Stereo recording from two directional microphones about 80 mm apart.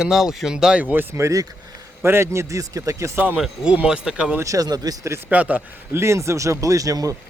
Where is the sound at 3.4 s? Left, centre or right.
Centre.